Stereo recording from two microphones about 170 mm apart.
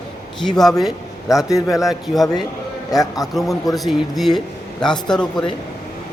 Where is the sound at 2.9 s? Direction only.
20° left (ahead or behind).